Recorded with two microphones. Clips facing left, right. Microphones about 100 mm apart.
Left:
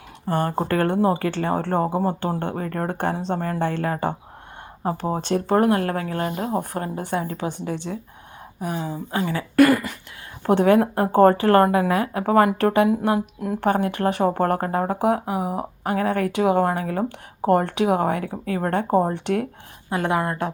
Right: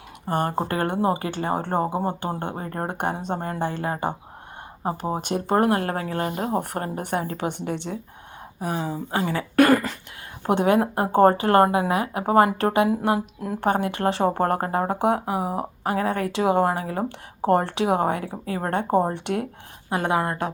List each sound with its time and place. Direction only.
0.3 s speech: 20° right (ahead or behind)
2.6 s speech: 25° right (ahead or behind)
3.0 s speech: 15° right (ahead or behind)
3.3 s speech: 25° right (ahead or behind)
3.6 s speech: 15° right (ahead or behind)
5.1 s speech: 20° right (ahead or behind)
5.5 s a woman's voice: 35° right (ahead or behind); by 7.4 s 50° right (ahead or behind)
7.6 s a woman's voice: 60° right (ahead or behind)
8.6 s speech: 45° right (ahead or behind)
10.5 s speech: 20° right (ahead or behind)